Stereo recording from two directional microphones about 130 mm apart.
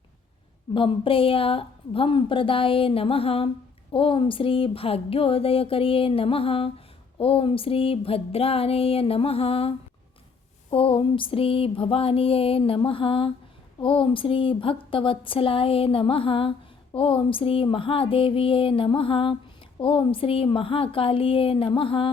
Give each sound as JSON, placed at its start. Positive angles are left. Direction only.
{"t": 0.7, "sound": "speech", "side_deg": 40}